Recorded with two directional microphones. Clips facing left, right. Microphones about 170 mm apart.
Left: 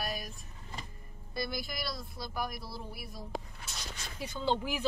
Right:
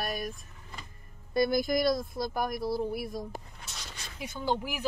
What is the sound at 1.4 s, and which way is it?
Speech, 50° right (ahead or behind).